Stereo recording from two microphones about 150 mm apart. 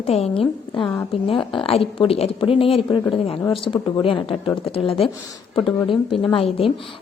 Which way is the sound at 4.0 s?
35° left (ahead or behind).